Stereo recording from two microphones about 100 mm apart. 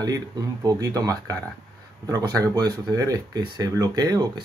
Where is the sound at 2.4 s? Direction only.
40° right (ahead or behind).